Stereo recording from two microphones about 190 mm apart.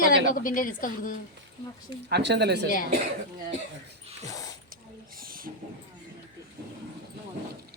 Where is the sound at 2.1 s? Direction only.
60° right (ahead or behind).